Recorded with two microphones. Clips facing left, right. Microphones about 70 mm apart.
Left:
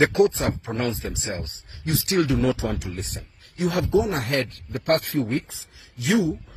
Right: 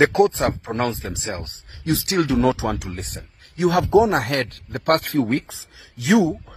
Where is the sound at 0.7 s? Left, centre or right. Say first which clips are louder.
Right 3 dB; right.